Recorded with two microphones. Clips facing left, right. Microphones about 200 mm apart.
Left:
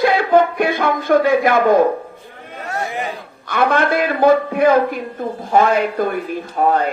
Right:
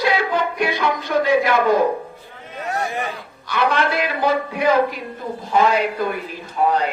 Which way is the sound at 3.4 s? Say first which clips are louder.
Left 3 dB; 50° left (ahead or behind).